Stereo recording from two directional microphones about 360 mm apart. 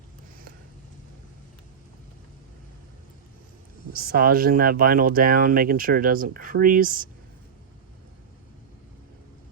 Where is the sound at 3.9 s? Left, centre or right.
Right.